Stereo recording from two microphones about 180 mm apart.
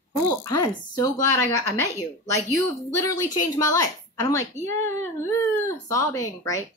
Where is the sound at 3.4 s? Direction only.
20° left (ahead or behind).